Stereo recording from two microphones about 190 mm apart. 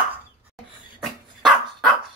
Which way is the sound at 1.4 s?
Centre (ahead or behind).